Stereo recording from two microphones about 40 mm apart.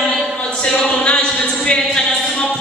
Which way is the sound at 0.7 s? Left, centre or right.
Left.